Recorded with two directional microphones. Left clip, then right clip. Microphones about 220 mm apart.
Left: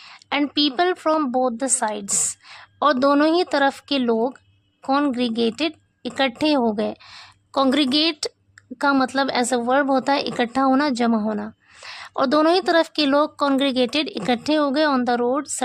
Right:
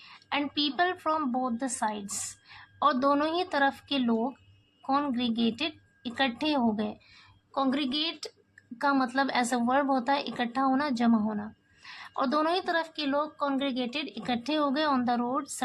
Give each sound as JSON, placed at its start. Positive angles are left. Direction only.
{"t": 0.0, "sound": "a woman's voice", "side_deg": 45}